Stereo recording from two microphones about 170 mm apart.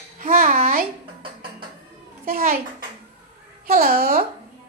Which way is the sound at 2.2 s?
60° right (ahead or behind).